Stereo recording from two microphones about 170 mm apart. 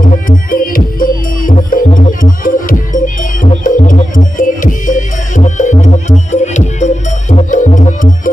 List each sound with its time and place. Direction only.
0.0 s music: 55° left (ahead or behind)